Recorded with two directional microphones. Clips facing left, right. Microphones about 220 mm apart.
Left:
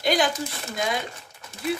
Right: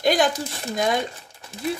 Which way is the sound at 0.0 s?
50° right (ahead or behind).